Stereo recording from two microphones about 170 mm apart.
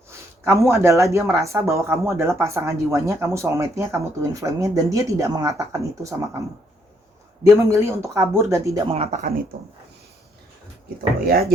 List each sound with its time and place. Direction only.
0.1 s speech: 15° right (ahead or behind)
7.4 s speech: 15° right (ahead or behind)
8.9 s speech: 35° right (ahead or behind)
11.3 s speech: 65° right (ahead or behind)